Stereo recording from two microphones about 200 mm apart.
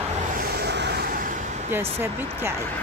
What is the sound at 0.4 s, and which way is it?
Vehicle, 55° right (ahead or behind).